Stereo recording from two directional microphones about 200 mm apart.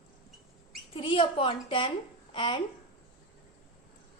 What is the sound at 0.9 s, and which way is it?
A woman's voice, 25° left (ahead or behind).